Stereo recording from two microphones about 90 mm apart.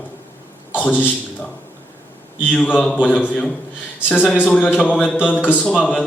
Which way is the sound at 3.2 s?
15° left (ahead or behind).